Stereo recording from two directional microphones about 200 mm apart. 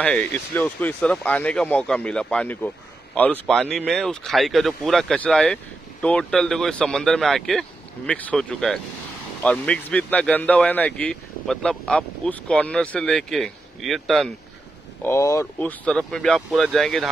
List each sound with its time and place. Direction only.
0.0 s speech: 5° left (ahead or behind)
15.0 s speech: 15° left (ahead or behind)